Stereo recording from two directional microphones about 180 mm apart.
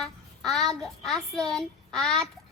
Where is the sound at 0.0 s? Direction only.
Centre (ahead or behind).